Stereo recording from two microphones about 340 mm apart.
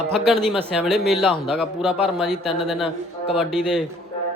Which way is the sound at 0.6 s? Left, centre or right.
Centre.